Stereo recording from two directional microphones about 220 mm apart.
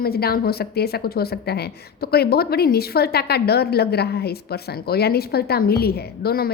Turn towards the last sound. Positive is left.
turn(degrees=45)  # may be behind; listen again after turning